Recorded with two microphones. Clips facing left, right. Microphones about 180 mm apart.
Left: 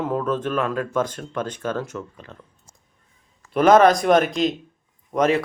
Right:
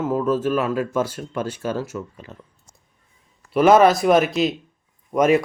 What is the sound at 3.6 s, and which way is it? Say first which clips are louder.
Speech: even; 5° right (ahead or behind).